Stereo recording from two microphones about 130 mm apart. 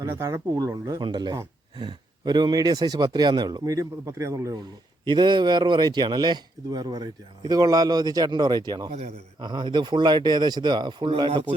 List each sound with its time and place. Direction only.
0.0 s a man's voice: 25° right (ahead or behind)
5.0 s a man's voice: 35° right (ahead or behind)